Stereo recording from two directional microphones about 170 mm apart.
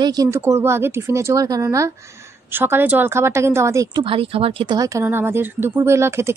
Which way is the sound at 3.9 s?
30° right (ahead or behind).